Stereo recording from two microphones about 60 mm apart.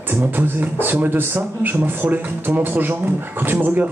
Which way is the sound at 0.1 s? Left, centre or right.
Right.